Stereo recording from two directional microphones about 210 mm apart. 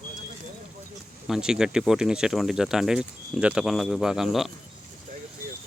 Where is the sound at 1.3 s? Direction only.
5° right (ahead or behind).